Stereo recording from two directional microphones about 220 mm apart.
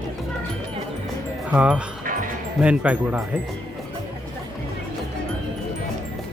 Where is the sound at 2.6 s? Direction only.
5° right (ahead or behind).